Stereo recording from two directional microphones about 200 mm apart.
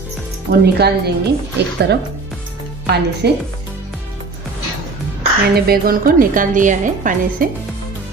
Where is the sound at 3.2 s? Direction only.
55° right (ahead or behind).